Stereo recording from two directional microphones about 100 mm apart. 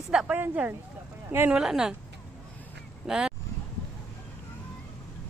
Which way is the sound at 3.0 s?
5° right (ahead or behind).